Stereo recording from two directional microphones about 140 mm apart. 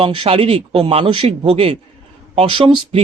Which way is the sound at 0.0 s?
40° right (ahead or behind).